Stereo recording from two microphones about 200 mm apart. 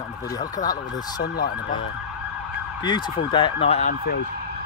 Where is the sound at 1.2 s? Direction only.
50° left (ahead or behind).